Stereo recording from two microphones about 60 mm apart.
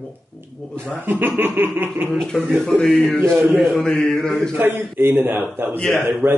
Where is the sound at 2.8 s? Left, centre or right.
Left.